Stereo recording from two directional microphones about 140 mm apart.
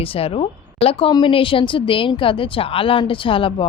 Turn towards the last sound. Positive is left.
turn(degrees=40)  # may be behind; listen again after turning